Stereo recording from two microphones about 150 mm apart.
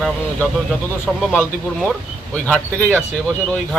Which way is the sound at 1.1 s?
Centre (ahead or behind).